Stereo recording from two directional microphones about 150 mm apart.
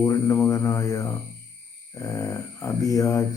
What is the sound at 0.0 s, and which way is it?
Speech, 20° left (ahead or behind).